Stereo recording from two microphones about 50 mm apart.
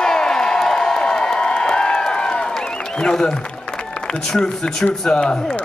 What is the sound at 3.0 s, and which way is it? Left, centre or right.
A man's voice, centre.